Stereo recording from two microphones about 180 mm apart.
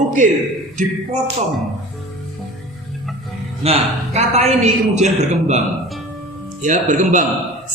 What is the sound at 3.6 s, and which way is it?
A man's voice, 35° right (ahead or behind).